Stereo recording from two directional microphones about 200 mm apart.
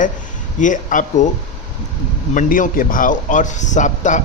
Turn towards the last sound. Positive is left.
turn(degrees=40)  # may be behind; listen again after turning